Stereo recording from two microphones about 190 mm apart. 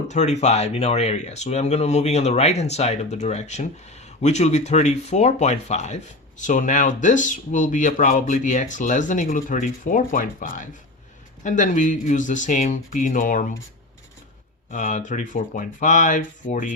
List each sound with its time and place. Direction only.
0.1 s speech: 35° left (ahead or behind)
14.7 s speech: 40° left (ahead or behind)